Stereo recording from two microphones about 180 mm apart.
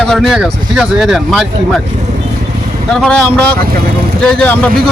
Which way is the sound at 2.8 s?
5° left (ahead or behind).